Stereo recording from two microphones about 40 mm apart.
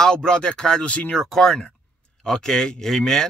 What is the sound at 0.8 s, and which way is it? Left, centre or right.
Speech, left.